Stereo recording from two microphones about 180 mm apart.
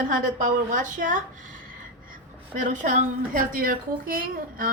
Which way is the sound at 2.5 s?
45° right (ahead or behind).